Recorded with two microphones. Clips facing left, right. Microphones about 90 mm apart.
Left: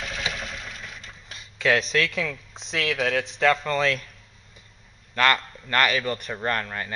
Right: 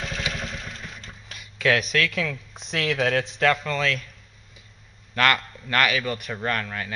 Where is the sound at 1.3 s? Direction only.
30° left (ahead or behind).